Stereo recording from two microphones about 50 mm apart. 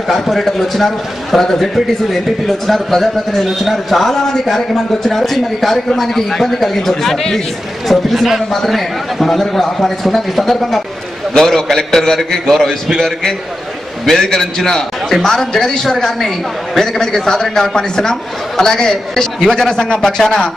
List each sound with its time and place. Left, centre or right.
0.1 s a man's voice: centre